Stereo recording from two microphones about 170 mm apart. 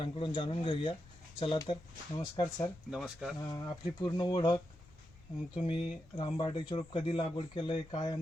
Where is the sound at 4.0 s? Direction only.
25° left (ahead or behind).